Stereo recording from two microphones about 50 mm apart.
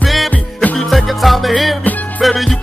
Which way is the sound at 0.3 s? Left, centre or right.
Left.